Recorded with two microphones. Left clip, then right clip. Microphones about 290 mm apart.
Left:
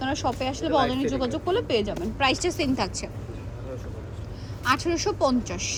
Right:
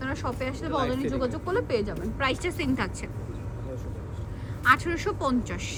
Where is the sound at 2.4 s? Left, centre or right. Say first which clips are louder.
Left 3 dB; centre.